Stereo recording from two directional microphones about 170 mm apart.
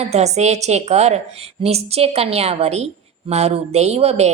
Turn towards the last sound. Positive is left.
turn(degrees=-40)  # may be behind; listen again after turning